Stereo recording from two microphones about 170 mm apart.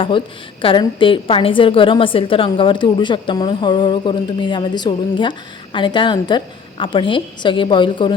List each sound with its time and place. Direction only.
0.6 s a woman's voice: 30° left (ahead or behind)